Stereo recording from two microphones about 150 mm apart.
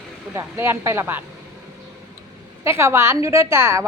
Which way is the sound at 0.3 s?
15° right (ahead or behind).